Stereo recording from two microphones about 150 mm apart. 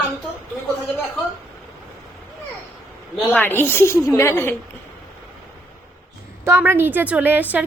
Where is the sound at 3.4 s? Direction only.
15° left (ahead or behind).